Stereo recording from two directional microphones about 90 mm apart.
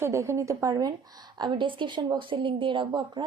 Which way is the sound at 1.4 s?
65° right (ahead or behind).